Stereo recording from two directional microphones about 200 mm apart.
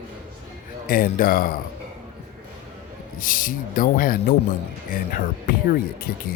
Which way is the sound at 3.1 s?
45° left (ahead or behind).